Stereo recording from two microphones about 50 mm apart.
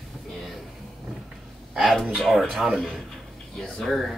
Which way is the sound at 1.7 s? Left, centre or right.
Centre.